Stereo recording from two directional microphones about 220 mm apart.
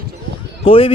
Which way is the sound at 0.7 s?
25° left (ahead or behind).